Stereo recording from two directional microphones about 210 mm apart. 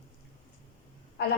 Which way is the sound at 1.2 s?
50° left (ahead or behind).